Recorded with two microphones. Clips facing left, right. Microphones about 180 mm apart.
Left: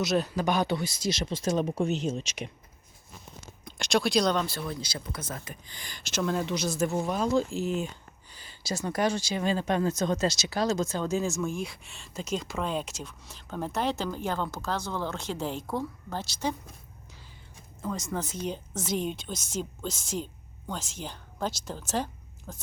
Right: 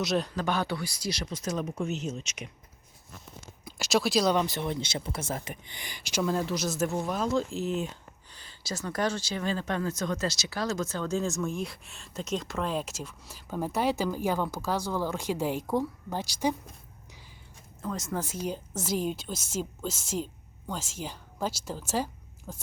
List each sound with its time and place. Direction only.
0.0 s speech: centre (ahead or behind); by 2.5 s 30° left (ahead or behind)
3.6 s speech: 5° right (ahead or behind); by 11.2 s 15° left (ahead or behind)
11.2 s speech: centre (ahead or behind)
17.8 s speech: 5° right (ahead or behind)